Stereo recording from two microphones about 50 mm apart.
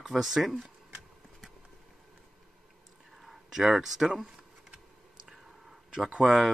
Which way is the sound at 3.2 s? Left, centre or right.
Centre.